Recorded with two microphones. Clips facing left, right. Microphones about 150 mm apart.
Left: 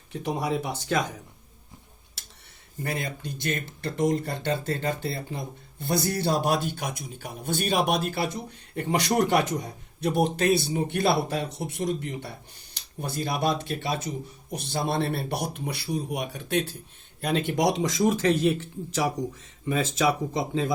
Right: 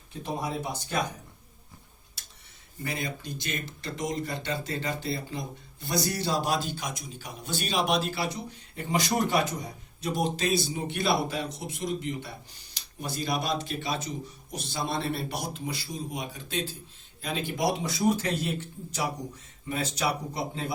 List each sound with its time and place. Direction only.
0.2 s speech: 80° left
2.8 s speech: 55° left (ahead or behind); by 20.7 s 90° left